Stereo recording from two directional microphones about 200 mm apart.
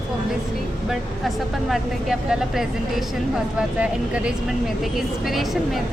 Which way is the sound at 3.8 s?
5° right (ahead or behind).